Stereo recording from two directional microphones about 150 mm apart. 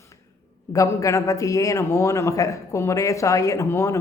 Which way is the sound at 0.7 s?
20° left (ahead or behind).